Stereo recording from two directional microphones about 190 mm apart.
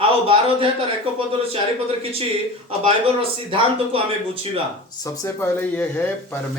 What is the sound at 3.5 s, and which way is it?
Speech, 30° right (ahead or behind).